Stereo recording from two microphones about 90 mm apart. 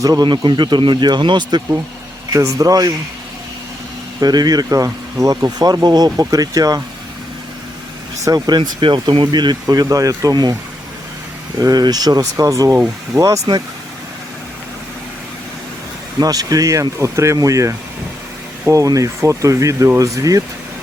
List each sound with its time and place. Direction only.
0.0 s speech: 45° right (ahead or behind)
0.3 s speech: 60° right (ahead or behind)
2.3 s speech: 40° right (ahead or behind)
4.2 s speech: 50° right (ahead or behind)
8.2 s speech: 45° right (ahead or behind)
16.2 s speech: 45° right (ahead or behind)